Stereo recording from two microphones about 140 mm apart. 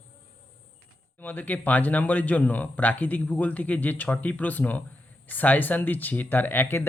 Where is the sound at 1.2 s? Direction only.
10° left (ahead or behind).